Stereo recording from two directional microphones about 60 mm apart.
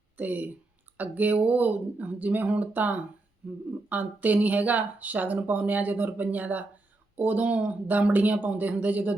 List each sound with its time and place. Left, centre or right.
0.2 s speech: right